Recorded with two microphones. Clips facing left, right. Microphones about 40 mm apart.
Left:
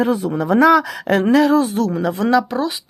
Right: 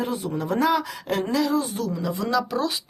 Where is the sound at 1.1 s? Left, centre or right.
Left.